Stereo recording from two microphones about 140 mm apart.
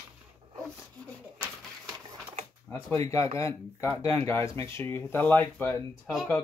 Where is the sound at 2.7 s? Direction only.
20° left (ahead or behind).